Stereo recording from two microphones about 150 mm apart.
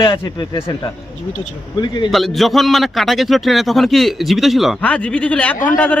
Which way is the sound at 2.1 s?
Centre (ahead or behind).